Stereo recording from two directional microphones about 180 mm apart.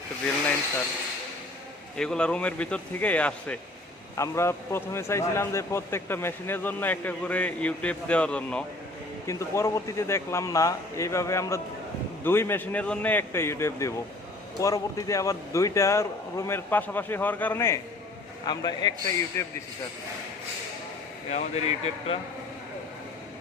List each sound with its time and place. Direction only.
2.0 s speech: 5° left (ahead or behind)
18.4 s a man's voice: 20° left (ahead or behind)
21.2 s speech: 35° left (ahead or behind)